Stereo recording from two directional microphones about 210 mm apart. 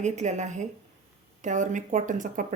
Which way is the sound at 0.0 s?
35° right (ahead or behind).